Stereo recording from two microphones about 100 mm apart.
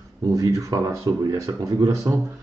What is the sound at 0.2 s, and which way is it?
Speech, 35° right (ahead or behind).